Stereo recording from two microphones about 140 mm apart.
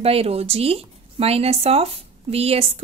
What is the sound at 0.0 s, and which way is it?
A woman's voice, 45° right (ahead or behind).